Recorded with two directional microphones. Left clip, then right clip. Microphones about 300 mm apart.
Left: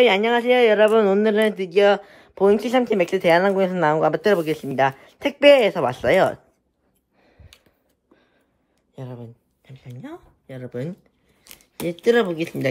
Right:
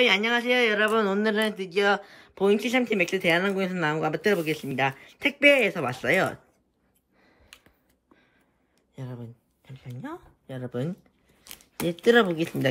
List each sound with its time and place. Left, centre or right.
0.0 s a man's voice: centre
4.0 s a man's voice: centre
8.9 s speech: centre
9.7 s speech: centre
10.4 s a man's voice: centre